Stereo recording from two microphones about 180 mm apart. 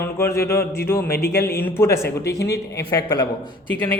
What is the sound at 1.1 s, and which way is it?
Speech, 60° left (ahead or behind).